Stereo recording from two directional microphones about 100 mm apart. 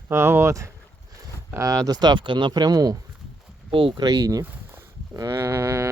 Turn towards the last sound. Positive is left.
turn(degrees=-30)  # may be behind; listen again after turning